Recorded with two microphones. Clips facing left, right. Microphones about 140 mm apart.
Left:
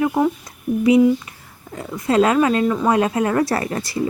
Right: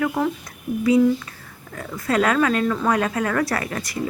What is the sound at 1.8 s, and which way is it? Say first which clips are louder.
Speech: left 4 dB; 20° left (ahead or behind).